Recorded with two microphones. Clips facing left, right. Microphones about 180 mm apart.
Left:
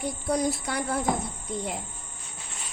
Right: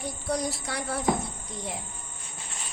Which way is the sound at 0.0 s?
55° left (ahead or behind).